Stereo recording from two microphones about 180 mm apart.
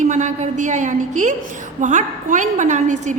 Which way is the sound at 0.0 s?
45° right (ahead or behind).